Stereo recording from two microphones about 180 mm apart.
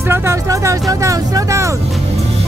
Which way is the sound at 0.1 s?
15° right (ahead or behind).